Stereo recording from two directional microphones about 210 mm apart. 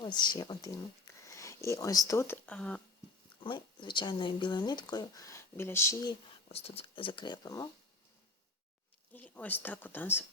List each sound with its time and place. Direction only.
0.0 s speech: 20° left (ahead or behind); by 2.8 s 5° left (ahead or behind)
3.4 s speech: 20° left (ahead or behind)
6.5 s speech: 30° left (ahead or behind)
9.1 s speech: 5° left (ahead or behind)